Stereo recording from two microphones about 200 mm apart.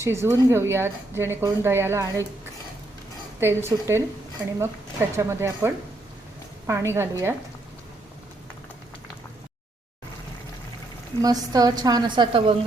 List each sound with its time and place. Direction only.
0.0 s speech: 15° right (ahead or behind)
3.4 s speech: 15° right (ahead or behind)
11.2 s a woman's voice: 20° right (ahead or behind)